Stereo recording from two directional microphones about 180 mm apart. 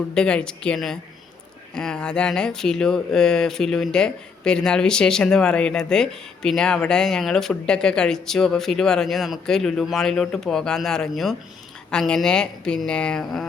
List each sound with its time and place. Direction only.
0.1 s speech: 5° left (ahead or behind)